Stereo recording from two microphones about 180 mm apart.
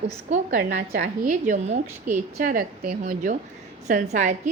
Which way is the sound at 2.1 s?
50° right (ahead or behind).